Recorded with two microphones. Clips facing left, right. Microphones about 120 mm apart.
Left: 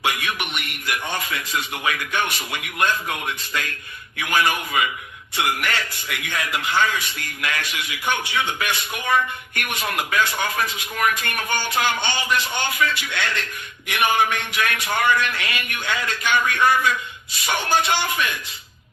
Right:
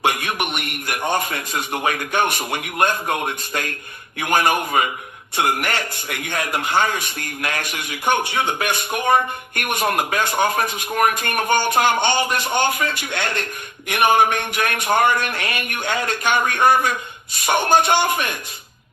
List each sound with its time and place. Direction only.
0.0 s a man's voice: 50° right (ahead or behind)